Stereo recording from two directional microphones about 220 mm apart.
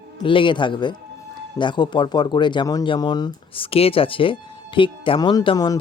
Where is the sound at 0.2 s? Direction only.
20° left (ahead or behind).